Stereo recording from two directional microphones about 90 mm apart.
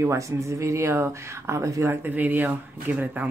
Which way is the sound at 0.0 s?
35° right (ahead or behind).